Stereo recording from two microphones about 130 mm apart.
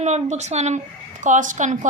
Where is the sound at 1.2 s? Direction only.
75° right (ahead or behind).